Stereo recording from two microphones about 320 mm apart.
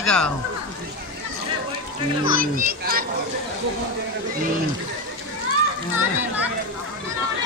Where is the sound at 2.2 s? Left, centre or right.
Right.